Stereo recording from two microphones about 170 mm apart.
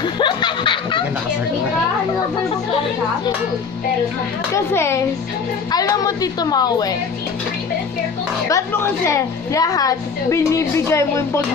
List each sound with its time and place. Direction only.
0.0 s snicker: 25° left (ahead or behind)
4.7 s a woman's voice: 15° left (ahead or behind)
8.5 s a woman's voice: 15° left (ahead or behind)